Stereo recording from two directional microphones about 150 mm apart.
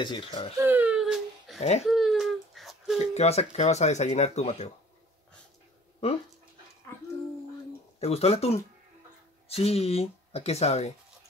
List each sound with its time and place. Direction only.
0.0 s speech: 30° left (ahead or behind)
0.6 s baby cry: 15° right (ahead or behind)
1.6 s speech: 45° left (ahead or behind)
1.9 s a sound: centre (ahead or behind)
3.2 s speech: 45° left (ahead or behind)
8.0 s speech: 45° left (ahead or behind)